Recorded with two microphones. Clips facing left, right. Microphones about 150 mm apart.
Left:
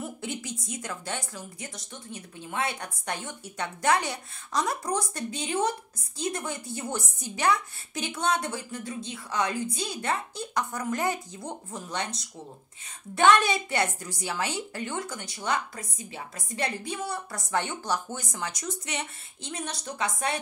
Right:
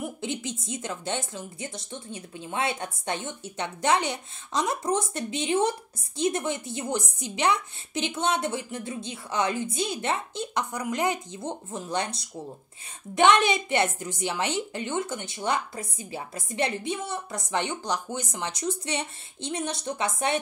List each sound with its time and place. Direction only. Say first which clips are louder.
0.0 s speech: right 3 dB; 20° right (ahead or behind)
13.1 s speech: right 1 dB; 20° right (ahead or behind)